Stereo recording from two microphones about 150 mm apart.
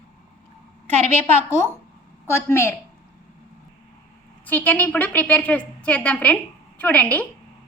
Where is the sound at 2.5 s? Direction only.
15° left (ahead or behind).